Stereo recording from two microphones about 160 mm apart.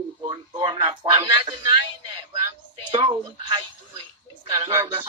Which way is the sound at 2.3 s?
30° right (ahead or behind).